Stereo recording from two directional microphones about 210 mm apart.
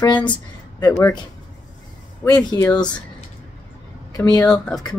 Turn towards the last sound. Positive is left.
turn(degrees=5)  # may be behind; listen again after turning